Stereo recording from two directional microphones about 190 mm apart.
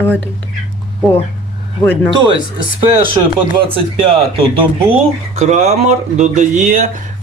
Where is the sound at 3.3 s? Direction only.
30° right (ahead or behind).